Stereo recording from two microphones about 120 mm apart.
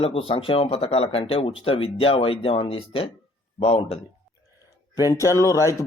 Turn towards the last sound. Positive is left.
turn(degrees=25)  # may be behind; listen again after turning